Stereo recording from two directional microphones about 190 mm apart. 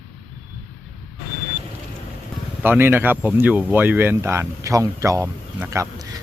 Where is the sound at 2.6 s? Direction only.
10° right (ahead or behind).